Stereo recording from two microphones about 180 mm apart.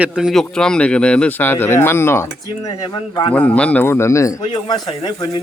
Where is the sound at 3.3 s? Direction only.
5° left (ahead or behind).